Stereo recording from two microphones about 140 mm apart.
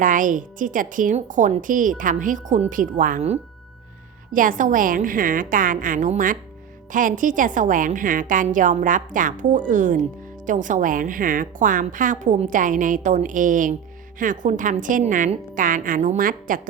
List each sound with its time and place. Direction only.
0.0 s a woman's voice: 70° right (ahead or behind)
4.3 s a woman's voice: 70° right (ahead or behind)